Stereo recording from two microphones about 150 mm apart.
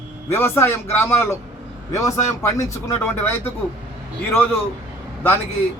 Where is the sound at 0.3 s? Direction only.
15° left (ahead or behind).